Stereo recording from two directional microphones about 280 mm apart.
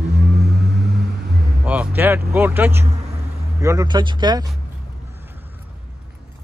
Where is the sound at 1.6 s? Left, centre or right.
Centre.